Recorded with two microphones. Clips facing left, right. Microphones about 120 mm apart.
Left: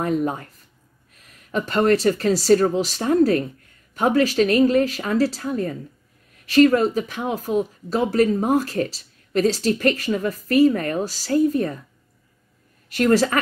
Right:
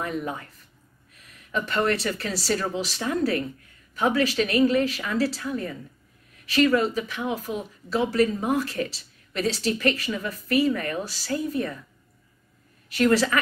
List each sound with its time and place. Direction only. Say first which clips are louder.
0.0 s speech: left 7 dB; 40° left (ahead or behind)
1.5 s speech: left 6 dB; 40° left (ahead or behind)
12.9 s a woman's voice: left 3 dB; 45° left (ahead or behind)